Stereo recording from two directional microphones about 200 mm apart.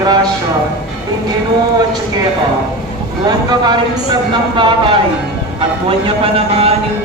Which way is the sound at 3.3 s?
20° right (ahead or behind).